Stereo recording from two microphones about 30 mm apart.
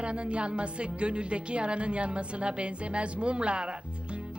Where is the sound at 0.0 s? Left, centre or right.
Right.